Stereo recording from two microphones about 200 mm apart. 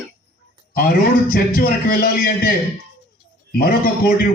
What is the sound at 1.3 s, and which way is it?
A man's voice, 45° left (ahead or behind).